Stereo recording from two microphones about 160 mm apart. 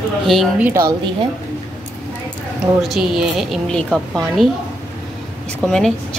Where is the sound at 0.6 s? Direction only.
20° right (ahead or behind).